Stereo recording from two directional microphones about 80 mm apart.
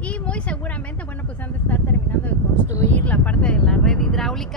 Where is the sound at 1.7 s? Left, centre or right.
Left.